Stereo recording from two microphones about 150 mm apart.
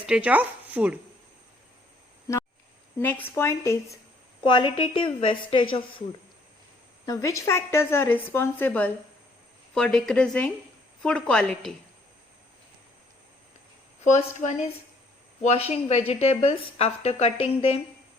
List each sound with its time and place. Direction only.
0.0 s speech: 10° right (ahead or behind)
3.0 s a woman's voice: 10° left (ahead or behind)
4.4 s a woman's voice: 35° left (ahead or behind)
7.0 s a woman's voice: 25° left (ahead or behind); by 11.7 s 5° left (ahead or behind)
14.3 s a woman's voice: 55° left (ahead or behind)
15.4 s a woman's voice: 45° left (ahead or behind)